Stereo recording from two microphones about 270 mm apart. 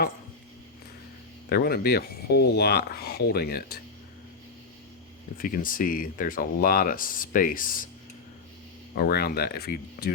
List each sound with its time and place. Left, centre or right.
1.5 s speech: left
5.4 s speech: left
9.0 s speech: left